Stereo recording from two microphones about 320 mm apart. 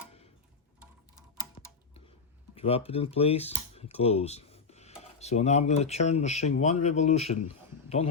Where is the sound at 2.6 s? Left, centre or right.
Centre.